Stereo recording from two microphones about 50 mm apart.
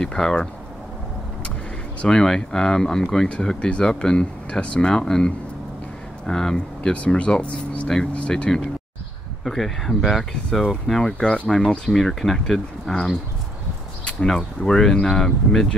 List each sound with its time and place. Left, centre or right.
0.0 s speech: centre
2.0 s speech: centre
6.9 s speech: left
9.4 s speech: centre
14.6 s speech: centre